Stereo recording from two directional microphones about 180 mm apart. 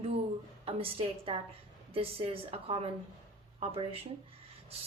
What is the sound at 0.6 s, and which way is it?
A woman's voice, 30° right (ahead or behind).